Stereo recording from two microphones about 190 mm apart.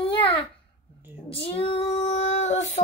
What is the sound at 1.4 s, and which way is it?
Female singing, 30° left (ahead or behind).